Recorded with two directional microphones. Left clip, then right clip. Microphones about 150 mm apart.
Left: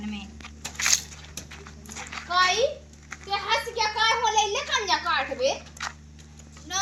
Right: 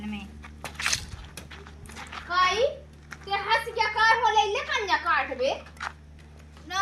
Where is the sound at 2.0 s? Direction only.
5° left (ahead or behind).